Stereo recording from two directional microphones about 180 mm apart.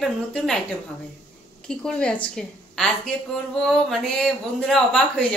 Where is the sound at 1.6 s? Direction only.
5° left (ahead or behind).